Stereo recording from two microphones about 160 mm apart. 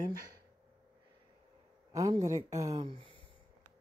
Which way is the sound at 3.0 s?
35° right (ahead or behind).